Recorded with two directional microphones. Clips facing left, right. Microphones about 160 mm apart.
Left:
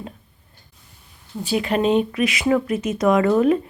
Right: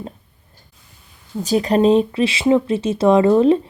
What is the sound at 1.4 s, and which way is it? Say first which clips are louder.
Speech: right 5 dB; 40° right (ahead or behind).